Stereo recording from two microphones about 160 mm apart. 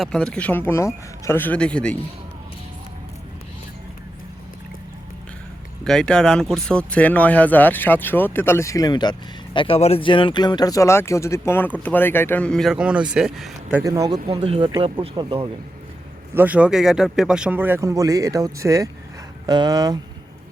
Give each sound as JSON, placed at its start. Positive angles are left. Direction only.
{"t": 0.0, "sound": "speech", "side_deg": 5}
{"t": 5.8, "sound": "speech", "side_deg": 5}
{"t": 13.8, "sound": "speech", "side_deg": -25}
{"t": 14.3, "sound": "speech", "side_deg": -35}
{"t": 16.3, "sound": "speech", "side_deg": -10}